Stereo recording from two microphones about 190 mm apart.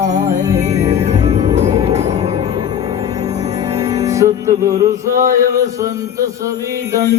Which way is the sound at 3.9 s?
15° right (ahead or behind).